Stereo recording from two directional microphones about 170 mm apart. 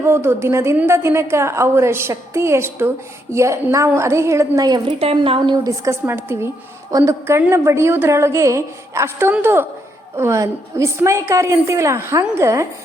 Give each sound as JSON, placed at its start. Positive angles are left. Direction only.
{"t": 0.0, "sound": "a woman's voice", "side_deg": -15}
{"t": 4.9, "sound": "speech", "side_deg": -35}
{"t": 5.6, "sound": "a woman's voice", "side_deg": -15}